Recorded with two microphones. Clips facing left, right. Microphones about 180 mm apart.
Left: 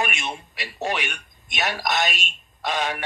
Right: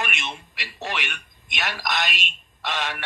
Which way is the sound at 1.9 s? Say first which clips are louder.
Left 3 dB; 45° left (ahead or behind).